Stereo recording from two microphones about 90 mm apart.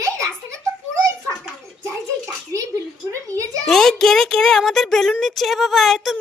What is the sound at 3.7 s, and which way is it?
Music, 5° left (ahead or behind).